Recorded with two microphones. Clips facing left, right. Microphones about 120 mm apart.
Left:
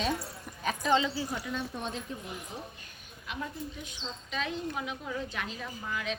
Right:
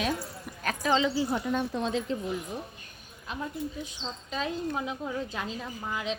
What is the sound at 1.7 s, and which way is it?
Speech, 90° right.